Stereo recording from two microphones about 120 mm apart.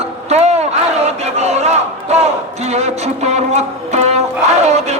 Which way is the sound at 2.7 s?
65° right (ahead or behind).